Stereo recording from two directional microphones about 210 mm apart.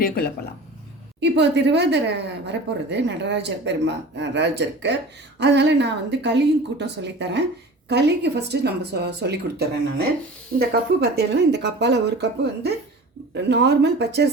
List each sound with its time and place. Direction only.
1.2 s a woman's voice: 55° right (ahead or behind)